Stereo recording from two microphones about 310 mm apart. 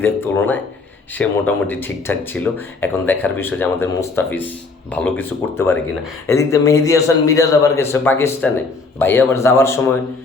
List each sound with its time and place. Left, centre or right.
0.0 s a man's voice: centre